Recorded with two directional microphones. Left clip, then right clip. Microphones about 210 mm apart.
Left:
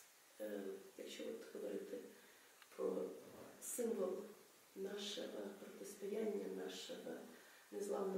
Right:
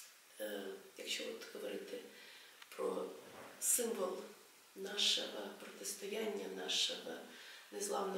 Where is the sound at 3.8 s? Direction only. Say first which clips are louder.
Even; 15° left (ahead or behind).